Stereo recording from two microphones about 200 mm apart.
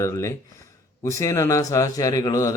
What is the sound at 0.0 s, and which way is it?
Speech, 15° left (ahead or behind).